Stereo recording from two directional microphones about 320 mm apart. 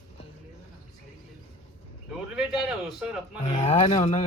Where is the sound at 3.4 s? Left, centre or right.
Left.